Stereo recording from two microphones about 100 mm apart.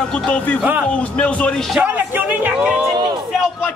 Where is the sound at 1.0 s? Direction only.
15° left (ahead or behind).